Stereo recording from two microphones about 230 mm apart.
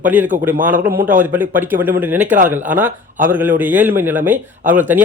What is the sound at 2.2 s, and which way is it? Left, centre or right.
Speech, right.